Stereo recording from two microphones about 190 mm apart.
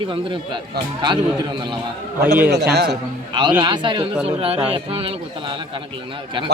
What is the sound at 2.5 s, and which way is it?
Speech, 60° right (ahead or behind).